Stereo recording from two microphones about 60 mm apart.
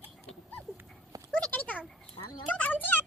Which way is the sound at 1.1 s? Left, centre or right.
Right.